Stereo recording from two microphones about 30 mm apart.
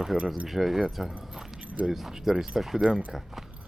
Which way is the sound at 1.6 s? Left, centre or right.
Right.